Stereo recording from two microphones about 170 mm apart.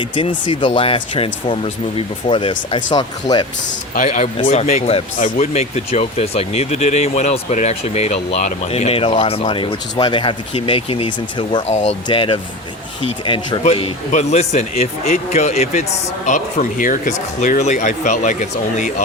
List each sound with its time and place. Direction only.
0.0 s speech: 30° left (ahead or behind)
3.9 s speech: 50° left (ahead or behind); by 11.6 s 30° left (ahead or behind)
11.7 s speech: 40° left (ahead or behind)